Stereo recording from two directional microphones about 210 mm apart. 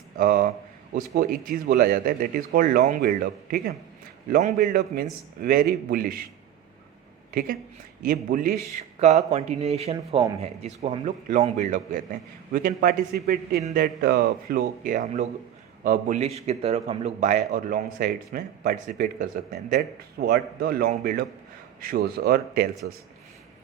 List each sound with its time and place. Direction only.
0.2 s speech: 45° right (ahead or behind)
7.3 s a man's voice: 45° right (ahead or behind)